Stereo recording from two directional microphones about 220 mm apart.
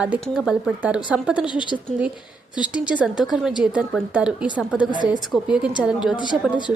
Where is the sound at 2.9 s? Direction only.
Centre (ahead or behind).